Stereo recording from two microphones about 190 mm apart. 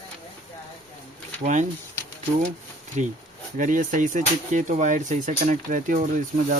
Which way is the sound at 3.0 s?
40° right (ahead or behind).